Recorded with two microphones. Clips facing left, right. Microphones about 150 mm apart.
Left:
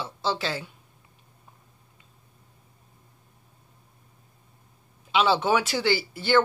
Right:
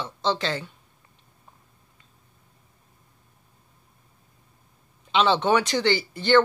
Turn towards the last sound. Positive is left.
turn(degrees=5)  # may be behind; listen again after turning